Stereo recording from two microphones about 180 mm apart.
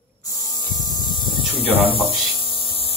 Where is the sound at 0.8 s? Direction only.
20° left (ahead or behind).